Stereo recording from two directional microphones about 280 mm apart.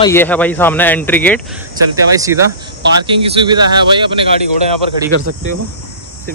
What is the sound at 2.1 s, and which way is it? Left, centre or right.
Speech, centre.